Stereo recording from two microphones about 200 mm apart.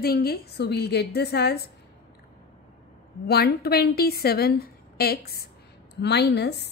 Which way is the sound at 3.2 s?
50° left (ahead or behind).